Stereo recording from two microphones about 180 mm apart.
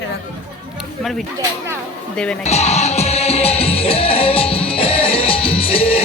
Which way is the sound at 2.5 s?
35° left (ahead or behind).